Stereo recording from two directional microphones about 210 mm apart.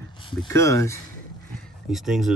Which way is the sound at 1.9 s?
Centre (ahead or behind).